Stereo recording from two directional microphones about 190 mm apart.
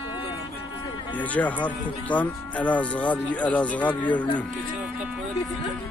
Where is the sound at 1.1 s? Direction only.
10° left (ahead or behind).